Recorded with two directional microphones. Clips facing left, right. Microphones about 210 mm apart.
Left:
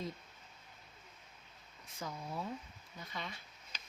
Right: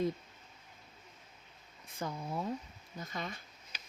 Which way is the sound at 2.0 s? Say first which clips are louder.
Right 5 dB; 65° right (ahead or behind).